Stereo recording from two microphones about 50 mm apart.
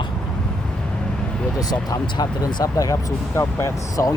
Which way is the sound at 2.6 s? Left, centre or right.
Left.